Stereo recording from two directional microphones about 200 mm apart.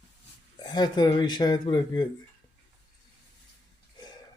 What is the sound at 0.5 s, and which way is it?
Speech, 20° left (ahead or behind).